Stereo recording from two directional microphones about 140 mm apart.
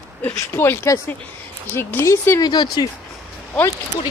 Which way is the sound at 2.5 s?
30° left (ahead or behind).